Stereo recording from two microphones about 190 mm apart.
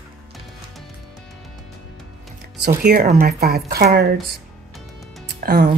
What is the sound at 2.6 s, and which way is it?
Speech, 50° right (ahead or behind).